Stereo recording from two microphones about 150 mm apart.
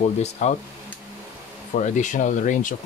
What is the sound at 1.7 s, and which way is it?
Speech, 55° left (ahead or behind).